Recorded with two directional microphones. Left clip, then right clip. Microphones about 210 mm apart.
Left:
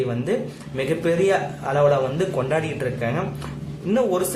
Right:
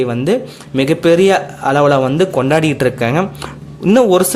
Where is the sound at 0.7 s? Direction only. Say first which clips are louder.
Right 11 dB; 45° right (ahead or behind).